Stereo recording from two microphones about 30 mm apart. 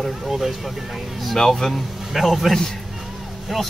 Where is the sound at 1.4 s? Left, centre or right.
Centre.